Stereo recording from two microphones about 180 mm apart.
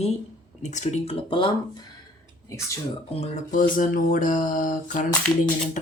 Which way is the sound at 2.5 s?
15° left (ahead or behind).